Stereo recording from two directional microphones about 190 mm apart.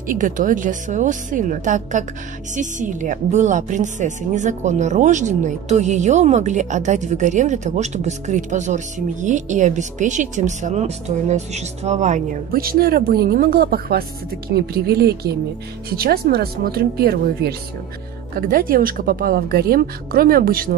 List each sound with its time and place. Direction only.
0.1 s a woman's voice: 45° right (ahead or behind)